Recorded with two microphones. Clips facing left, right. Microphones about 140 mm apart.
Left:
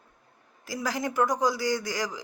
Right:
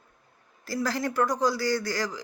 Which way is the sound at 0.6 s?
15° left (ahead or behind).